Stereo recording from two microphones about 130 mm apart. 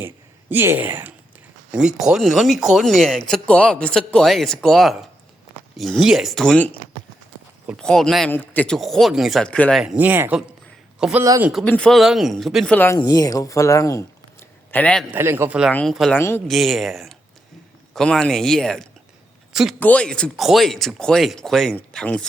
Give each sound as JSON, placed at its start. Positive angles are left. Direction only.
{"t": 0.5, "sound": "speech", "side_deg": -15}
{"t": 7.8, "sound": "speech", "side_deg": 5}
{"t": 8.3, "sound": "speech", "side_deg": 15}
{"t": 9.8, "sound": "speech", "side_deg": -10}
{"t": 11.6, "sound": "speech", "side_deg": 5}
{"t": 12.7, "sound": "speech", "side_deg": 15}
{"t": 13.0, "sound": "speech", "side_deg": 30}
{"t": 14.7, "sound": "a man's voice", "side_deg": 10}
{"t": 15.1, "sound": "speech", "side_deg": -15}
{"t": 15.7, "sound": "speech", "side_deg": 5}
{"t": 16.1, "sound": "speech", "side_deg": 20}
{"t": 16.5, "sound": "speech", "side_deg": 0}